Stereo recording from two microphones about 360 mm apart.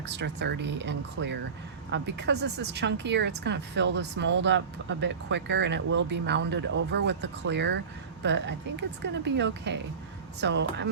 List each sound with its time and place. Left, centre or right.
0.1 s speech: right